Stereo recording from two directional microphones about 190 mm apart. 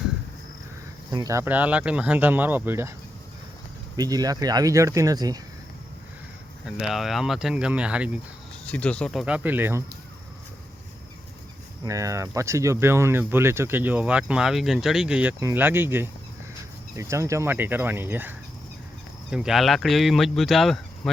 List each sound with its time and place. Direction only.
1.1 s speech: 15° right (ahead or behind)
3.9 s speech: 20° right (ahead or behind)
6.7 s speech: centre (ahead or behind)
8.6 s speech: 5° left (ahead or behind); by 9.8 s 10° right (ahead or behind)
11.9 s speech: 15° right (ahead or behind); by 21.1 s centre (ahead or behind)